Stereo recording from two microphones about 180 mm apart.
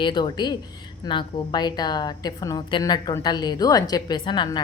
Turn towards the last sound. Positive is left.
turn(degrees=25)  # may be behind; listen again after turning